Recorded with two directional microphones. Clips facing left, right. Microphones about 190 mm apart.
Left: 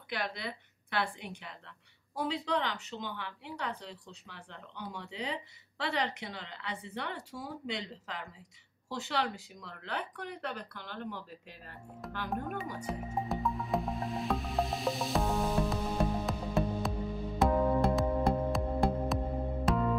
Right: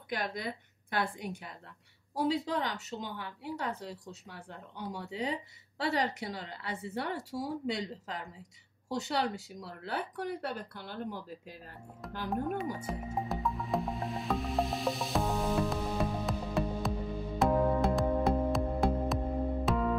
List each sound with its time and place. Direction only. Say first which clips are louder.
0.1 s a woman's voice: right 2 dB; 45° right (ahead or behind)
12.0 s speech: even; centre (ahead or behind)
12.8 s music: even; centre (ahead or behind)